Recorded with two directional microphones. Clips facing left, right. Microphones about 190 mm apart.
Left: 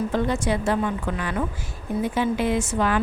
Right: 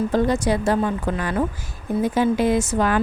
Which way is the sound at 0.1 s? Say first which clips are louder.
Right 4 dB; 40° right (ahead or behind).